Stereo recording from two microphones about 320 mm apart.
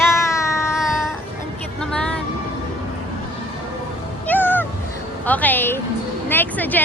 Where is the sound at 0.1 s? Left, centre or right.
Centre.